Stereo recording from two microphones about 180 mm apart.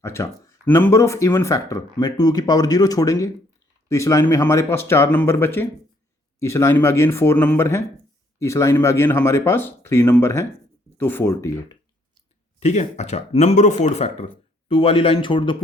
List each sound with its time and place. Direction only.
0.0 s speech: 15° left (ahead or behind)
12.5 s speech: 40° left (ahead or behind)